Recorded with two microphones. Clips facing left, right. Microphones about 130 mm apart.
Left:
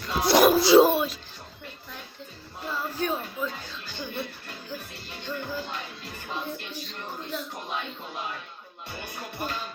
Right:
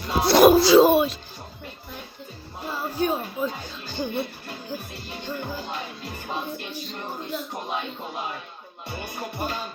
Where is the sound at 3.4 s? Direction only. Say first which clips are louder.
Right 4 dB; 30° right (ahead or behind).